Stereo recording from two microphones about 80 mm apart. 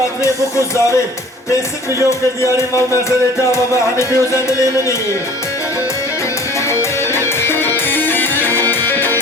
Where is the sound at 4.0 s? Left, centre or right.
Left.